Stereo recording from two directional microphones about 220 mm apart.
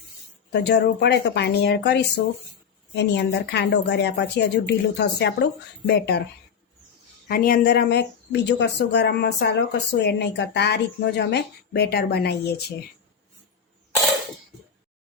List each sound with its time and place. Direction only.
0.5 s speech: 50° left (ahead or behind)
7.3 s speech: 40° left (ahead or behind)